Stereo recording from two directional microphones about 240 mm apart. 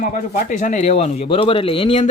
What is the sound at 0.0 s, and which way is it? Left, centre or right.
Speech, left.